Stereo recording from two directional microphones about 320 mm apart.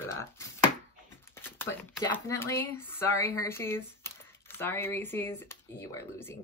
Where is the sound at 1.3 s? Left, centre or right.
Centre.